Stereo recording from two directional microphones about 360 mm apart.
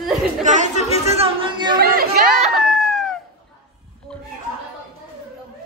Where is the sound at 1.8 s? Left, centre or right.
Right.